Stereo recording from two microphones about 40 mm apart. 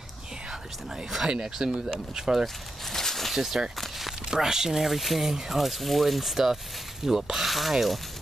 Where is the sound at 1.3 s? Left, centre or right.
Centre.